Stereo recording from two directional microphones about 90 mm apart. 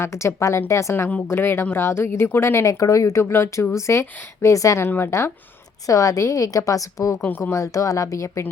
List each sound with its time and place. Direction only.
0.0 s a woman's voice: 30° left (ahead or behind)
7.3 s speech: 20° left (ahead or behind)
7.5 s a woman's voice: 40° left (ahead or behind)